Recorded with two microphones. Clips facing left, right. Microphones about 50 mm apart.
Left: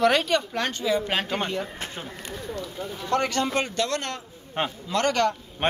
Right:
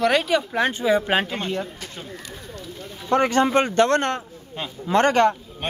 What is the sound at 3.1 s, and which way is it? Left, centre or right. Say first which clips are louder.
Speech: right 6 dB; right.